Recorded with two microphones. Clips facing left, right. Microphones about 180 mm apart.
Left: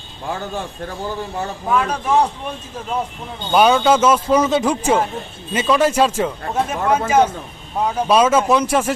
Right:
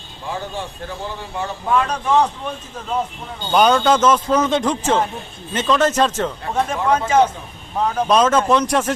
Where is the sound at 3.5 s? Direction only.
5° left (ahead or behind).